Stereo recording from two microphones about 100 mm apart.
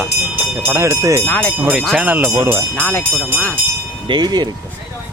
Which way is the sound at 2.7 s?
15° left (ahead or behind).